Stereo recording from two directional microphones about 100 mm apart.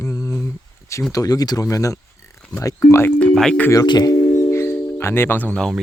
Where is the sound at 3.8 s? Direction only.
45° left (ahead or behind); by 5.6 s 15° left (ahead or behind).